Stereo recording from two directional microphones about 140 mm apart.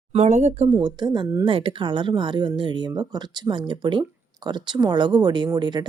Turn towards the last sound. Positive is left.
turn(degrees=-30)  # may be behind; listen again after turning